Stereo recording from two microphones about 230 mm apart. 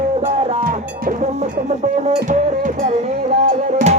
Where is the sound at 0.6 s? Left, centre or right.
Right.